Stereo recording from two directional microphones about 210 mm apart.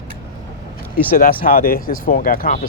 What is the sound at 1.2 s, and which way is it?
Speech, 45° left (ahead or behind).